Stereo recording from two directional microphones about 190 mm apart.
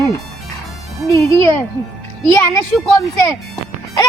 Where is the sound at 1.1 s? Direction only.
15° left (ahead or behind).